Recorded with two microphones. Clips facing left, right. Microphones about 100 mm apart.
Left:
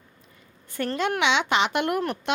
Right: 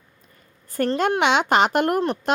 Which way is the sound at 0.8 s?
45° right (ahead or behind).